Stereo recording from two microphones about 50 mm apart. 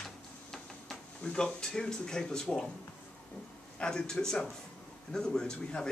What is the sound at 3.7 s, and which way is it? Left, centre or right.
A man's voice, centre.